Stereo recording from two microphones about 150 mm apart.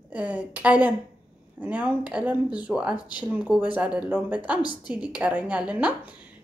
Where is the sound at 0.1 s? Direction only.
10° right (ahead or behind).